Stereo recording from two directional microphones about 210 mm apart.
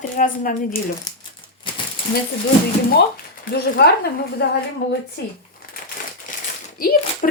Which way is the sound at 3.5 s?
45° left (ahead or behind).